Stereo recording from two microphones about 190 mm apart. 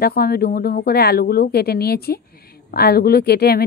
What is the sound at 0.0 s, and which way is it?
Speech, 55° left (ahead or behind).